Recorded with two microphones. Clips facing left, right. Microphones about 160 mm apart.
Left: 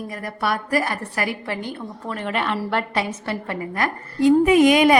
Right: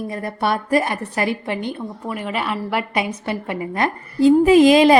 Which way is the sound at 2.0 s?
5° right (ahead or behind).